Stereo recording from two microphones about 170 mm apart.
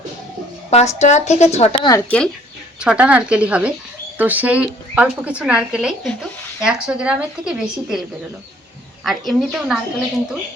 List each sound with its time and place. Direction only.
0.7 s a woman's voice: 40° left (ahead or behind)
2.0 s speech: 5° left (ahead or behind)
2.7 s speech: 5° right (ahead or behind)
9.0 s speech: centre (ahead or behind)